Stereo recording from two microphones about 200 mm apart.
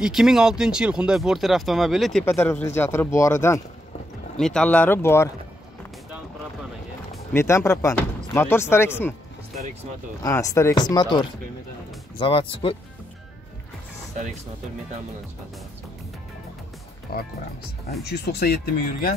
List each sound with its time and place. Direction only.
0.0 s speech: 5° right (ahead or behind); by 3.6 s 15° left (ahead or behind)
4.4 s speech: 5° left (ahead or behind)
7.3 s speech: 15° left (ahead or behind)
10.2 s speech: 15° left (ahead or behind)
17.1 s speech: 50° left (ahead or behind)